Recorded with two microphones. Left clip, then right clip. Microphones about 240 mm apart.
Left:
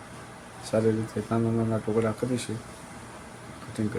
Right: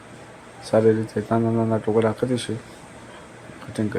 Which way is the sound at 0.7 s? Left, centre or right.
Centre.